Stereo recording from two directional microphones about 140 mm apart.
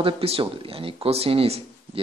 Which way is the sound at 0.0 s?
40° right (ahead or behind).